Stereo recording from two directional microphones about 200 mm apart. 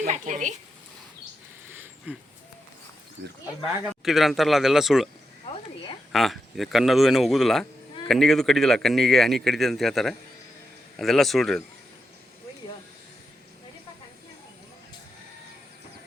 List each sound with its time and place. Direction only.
0.0 s speech: 40° right (ahead or behind)
1.7 s a sound: 10° right (ahead or behind)
4.0 s speech: centre (ahead or behind)
6.1 s speech: centre (ahead or behind)